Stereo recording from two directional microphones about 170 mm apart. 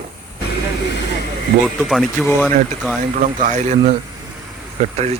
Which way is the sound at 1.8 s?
Centre (ahead or behind).